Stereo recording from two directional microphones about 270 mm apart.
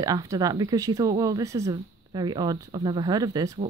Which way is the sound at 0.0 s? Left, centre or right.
Centre.